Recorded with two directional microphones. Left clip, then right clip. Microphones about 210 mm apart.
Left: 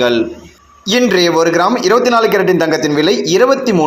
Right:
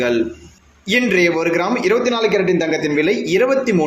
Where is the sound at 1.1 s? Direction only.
15° left (ahead or behind).